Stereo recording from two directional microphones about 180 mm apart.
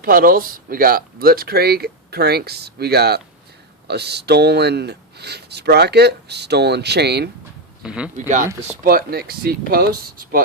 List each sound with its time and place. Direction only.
0.0 s speech: 55° right (ahead or behind)
7.8 s speech: 5° right (ahead or behind)
8.7 s speech: 50° right (ahead or behind)